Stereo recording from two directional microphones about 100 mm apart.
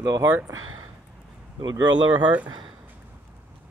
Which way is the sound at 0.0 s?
35° right (ahead or behind).